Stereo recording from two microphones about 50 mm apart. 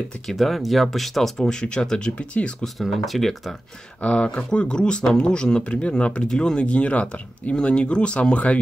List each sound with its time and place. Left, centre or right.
0.3 s speech: centre
1.5 s speech: centre
2.8 s speech: centre
4.0 s speech: left